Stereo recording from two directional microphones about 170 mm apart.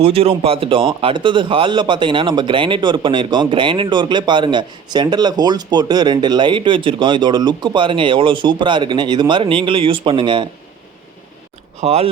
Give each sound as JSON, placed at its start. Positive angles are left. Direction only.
{"t": 0.0, "sound": "a man's voice", "side_deg": -35}
{"t": 11.8, "sound": "speech", "side_deg": -40}